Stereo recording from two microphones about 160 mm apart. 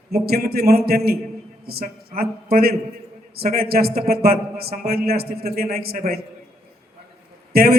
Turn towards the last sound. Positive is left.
turn(degrees=-75)  # may be behind; listen again after turning